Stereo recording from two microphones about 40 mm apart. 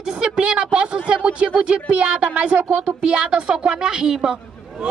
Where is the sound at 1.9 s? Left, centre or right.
Right.